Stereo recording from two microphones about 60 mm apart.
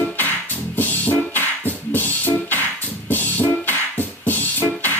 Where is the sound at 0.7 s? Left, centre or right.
Left.